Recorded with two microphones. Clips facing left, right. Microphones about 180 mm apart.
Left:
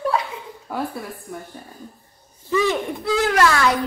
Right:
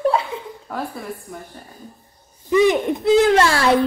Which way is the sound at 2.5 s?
20° right (ahead or behind).